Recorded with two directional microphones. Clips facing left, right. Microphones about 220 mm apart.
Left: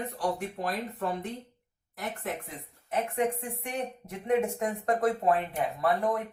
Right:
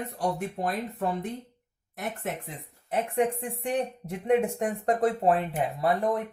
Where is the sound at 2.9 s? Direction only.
30° right (ahead or behind).